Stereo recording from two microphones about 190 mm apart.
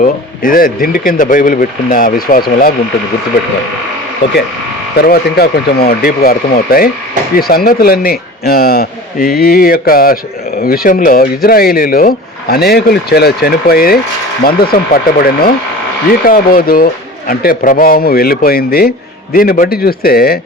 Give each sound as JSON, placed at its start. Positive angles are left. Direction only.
{"t": 0.0, "sound": "a man's voice", "side_deg": 45}
{"t": 4.9, "sound": "a man's voice", "side_deg": 55}